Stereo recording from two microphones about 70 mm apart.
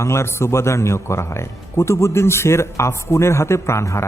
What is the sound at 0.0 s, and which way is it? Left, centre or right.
A man's voice, left.